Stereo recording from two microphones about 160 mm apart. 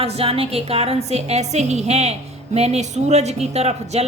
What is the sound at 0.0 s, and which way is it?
A woman's voice, 35° right (ahead or behind).